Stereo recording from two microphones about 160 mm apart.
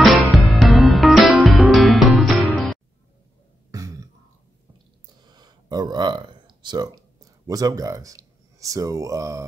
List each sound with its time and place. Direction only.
0.0 s music: centre (ahead or behind)
3.7 s throat clearing: 20° right (ahead or behind)
5.2 s a sound: 25° right (ahead or behind)
7.4 s speech: 20° right (ahead or behind)